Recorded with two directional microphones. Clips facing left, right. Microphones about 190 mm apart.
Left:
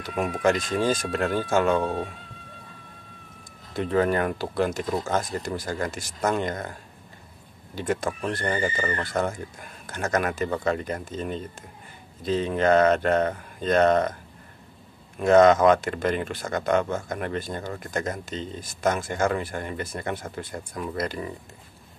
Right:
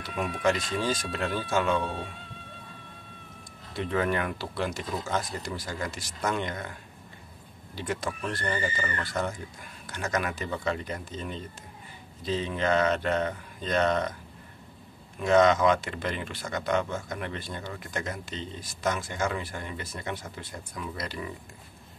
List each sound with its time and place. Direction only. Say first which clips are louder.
0.0 s speech: left 4 dB; 45° left (ahead or behind)
3.7 s speech: left 5 dB; 40° left (ahead or behind)
15.1 s speech: left 5 dB; 50° left (ahead or behind)